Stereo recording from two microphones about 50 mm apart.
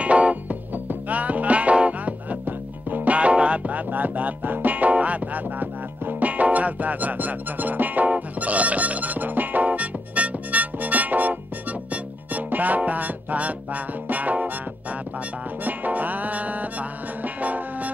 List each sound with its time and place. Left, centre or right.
0.0 s music: right
15.6 s music: right